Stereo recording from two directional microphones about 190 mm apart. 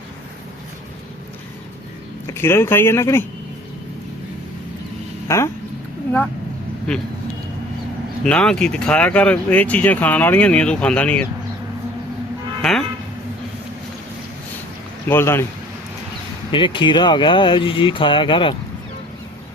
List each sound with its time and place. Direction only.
2.2 s speech: 15° left (ahead or behind)
5.3 s speech: 15° left (ahead or behind)
8.2 s speech: 5° left (ahead or behind)
12.6 s speech: 5° left (ahead or behind)
15.0 s speech: 10° left (ahead or behind)
16.5 s speech: 25° left (ahead or behind)